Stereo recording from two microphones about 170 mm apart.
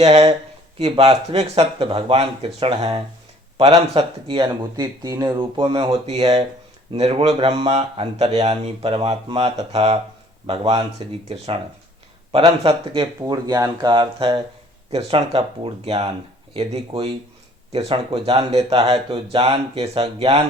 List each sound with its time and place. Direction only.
0.0 s speech: 40° right (ahead or behind)
4.8 s speech: 20° right (ahead or behind)